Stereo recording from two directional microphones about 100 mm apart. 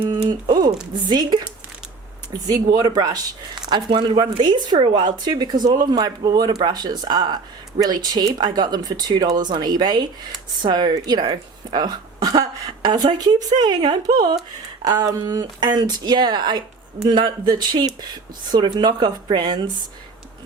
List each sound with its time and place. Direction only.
0.0 s typing: 45° right (ahead or behind)
0.9 s speech: 45° right (ahead or behind)
2.4 s speech: 40° right (ahead or behind)